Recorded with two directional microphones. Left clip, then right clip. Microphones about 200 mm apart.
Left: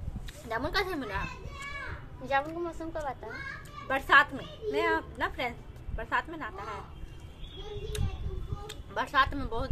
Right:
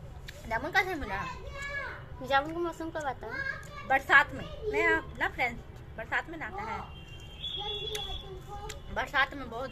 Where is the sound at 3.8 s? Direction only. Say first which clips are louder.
Even; 5° left (ahead or behind).